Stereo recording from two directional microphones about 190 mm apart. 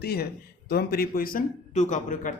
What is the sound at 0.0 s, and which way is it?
A man's voice, 55° left (ahead or behind).